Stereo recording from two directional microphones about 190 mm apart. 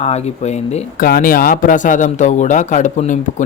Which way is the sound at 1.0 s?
50° left (ahead or behind).